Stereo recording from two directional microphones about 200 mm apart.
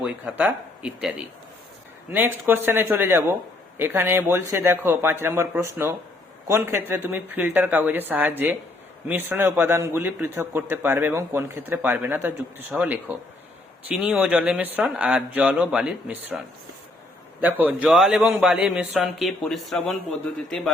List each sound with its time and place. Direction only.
0.0 s a man's voice: 5° right (ahead or behind)
2.1 s a man's voice: 10° right (ahead or behind)
17.4 s a man's voice: 10° right (ahead or behind)